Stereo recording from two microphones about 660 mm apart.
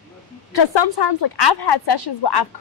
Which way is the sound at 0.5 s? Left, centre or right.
Left.